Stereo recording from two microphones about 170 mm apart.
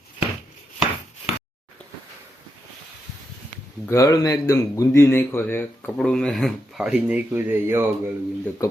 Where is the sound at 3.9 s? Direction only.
20° left (ahead or behind); by 7.9 s 10° right (ahead or behind).